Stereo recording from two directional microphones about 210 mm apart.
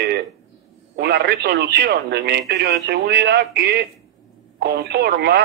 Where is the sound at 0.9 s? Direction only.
50° right (ahead or behind).